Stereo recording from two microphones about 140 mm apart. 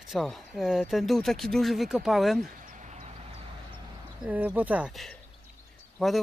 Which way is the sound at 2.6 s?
60° right (ahead or behind).